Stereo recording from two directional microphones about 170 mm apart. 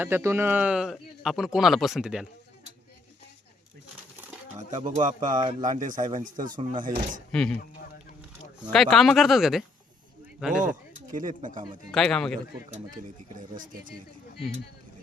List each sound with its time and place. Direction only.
0.0 s speech: 15° right (ahead or behind)
4.8 s speech: 45° right (ahead or behind)
5.4 s speech: 25° right (ahead or behind)
5.6 s speech: 50° right (ahead or behind)
6.6 s speech: 35° right (ahead or behind)
7.3 s speech: 5° left (ahead or behind)
8.7 s speech: centre (ahead or behind)
10.6 s speech: 50° right (ahead or behind)
11.9 s speech: 5° left (ahead or behind)
13.6 s speech: 50° right (ahead or behind)